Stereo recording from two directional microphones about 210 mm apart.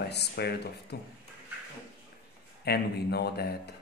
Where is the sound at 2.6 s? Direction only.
50° left (ahead or behind).